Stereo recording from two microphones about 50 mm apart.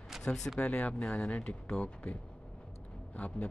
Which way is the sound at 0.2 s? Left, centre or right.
Centre.